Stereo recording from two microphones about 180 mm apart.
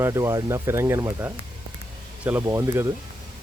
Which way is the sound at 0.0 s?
15° right (ahead or behind).